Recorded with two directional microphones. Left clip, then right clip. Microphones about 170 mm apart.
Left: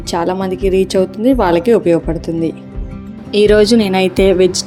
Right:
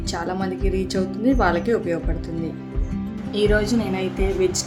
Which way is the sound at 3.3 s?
45° left (ahead or behind).